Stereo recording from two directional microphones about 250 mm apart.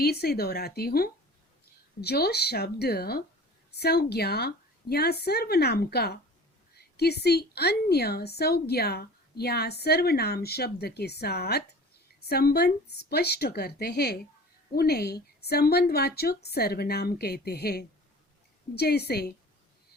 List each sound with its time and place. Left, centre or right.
0.0 s a woman's voice: left